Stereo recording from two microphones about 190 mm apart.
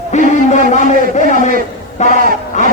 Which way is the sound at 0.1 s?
40° left (ahead or behind).